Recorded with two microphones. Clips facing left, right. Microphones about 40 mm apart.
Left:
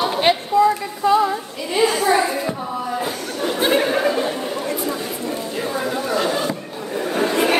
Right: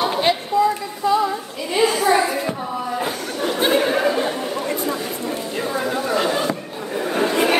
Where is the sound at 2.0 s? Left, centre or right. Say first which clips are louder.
Even; centre.